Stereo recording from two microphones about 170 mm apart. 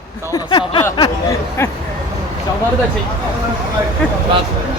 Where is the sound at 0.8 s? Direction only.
20° left (ahead or behind).